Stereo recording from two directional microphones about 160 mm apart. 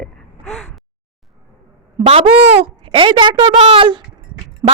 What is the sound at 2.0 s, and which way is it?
A woman's voice, 35° right (ahead or behind).